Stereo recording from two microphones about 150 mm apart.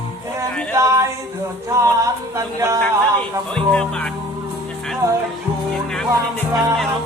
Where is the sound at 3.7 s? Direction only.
5° left (ahead or behind).